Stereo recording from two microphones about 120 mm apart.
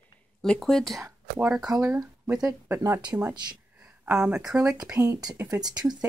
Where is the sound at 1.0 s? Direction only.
15° right (ahead or behind).